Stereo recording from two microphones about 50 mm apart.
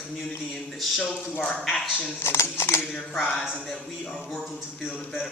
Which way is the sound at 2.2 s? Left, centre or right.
Left.